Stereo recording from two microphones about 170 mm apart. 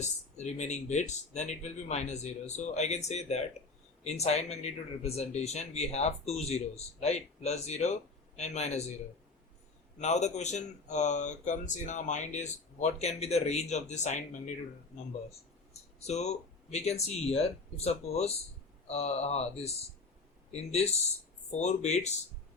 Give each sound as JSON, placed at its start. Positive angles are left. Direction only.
{"t": 0.0, "sound": "speech", "side_deg": 40}
{"t": 10.0, "sound": "speech", "side_deg": 45}
{"t": 16.0, "sound": "speech", "side_deg": 40}